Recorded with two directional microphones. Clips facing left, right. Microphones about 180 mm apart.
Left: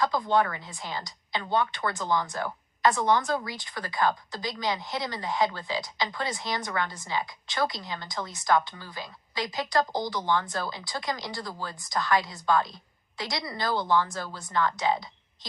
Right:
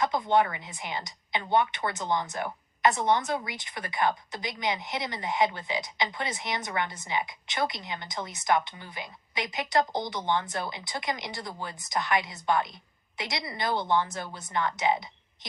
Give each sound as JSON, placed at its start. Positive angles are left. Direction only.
{"t": 0.0, "sound": "speech", "side_deg": -20}